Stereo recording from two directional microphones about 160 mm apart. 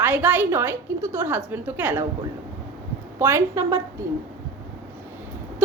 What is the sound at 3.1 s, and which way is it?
Speech, 15° right (ahead or behind).